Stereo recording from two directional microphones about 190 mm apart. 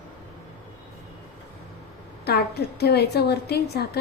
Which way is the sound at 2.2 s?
60° left (ahead or behind).